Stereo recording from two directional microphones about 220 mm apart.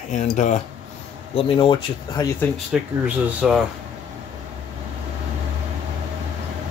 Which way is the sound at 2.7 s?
Centre (ahead or behind).